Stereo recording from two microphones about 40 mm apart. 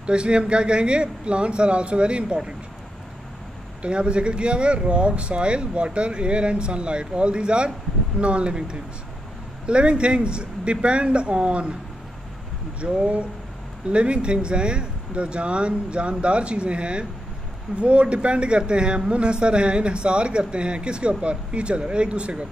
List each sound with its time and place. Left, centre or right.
0.0 s speech: right
3.8 s speech: right
12.8 s speech: right